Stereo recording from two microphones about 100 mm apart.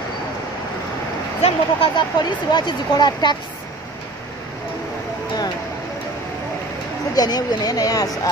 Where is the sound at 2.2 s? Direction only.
50° left (ahead or behind).